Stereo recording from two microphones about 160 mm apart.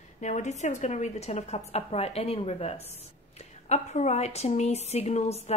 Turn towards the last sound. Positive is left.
turn(degrees=40)  # may be behind; listen again after turning